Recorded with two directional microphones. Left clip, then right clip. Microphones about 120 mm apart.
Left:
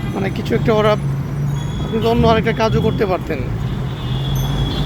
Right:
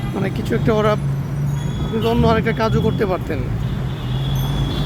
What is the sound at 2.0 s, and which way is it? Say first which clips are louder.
Speech: left 3 dB; 25° right (ahead or behind).